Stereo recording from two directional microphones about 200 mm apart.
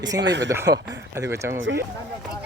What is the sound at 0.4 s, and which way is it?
Speech, 15° right (ahead or behind).